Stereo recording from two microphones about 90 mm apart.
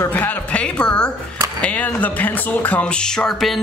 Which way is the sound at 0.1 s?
20° left (ahead or behind).